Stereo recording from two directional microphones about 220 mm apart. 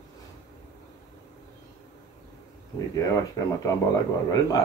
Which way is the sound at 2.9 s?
15° left (ahead or behind).